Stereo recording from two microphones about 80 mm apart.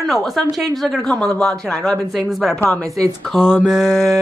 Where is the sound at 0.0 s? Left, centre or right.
Centre.